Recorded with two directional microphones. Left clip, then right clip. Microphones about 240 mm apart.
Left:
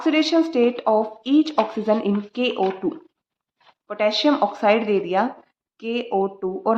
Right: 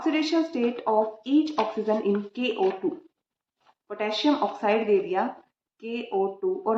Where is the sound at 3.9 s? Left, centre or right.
Left.